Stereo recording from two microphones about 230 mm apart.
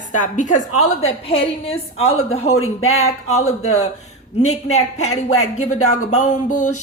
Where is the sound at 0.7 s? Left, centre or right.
Left.